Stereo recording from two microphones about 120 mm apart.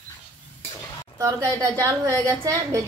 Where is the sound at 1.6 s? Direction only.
25° right (ahead or behind).